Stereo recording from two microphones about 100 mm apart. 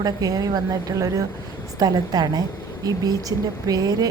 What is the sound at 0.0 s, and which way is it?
A woman's voice, 40° right (ahead or behind).